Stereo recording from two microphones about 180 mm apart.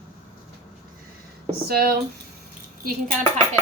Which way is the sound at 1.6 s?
55° right (ahead or behind).